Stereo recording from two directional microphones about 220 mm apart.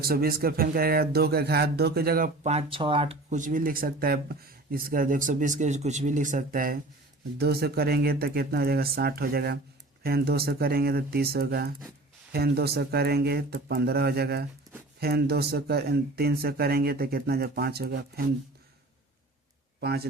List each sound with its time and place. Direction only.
0.0 s speech: 45° right (ahead or behind)
19.8 s speech: 45° right (ahead or behind)